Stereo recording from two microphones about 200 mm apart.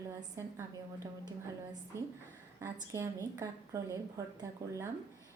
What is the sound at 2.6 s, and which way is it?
A woman's voice, 15° right (ahead or behind).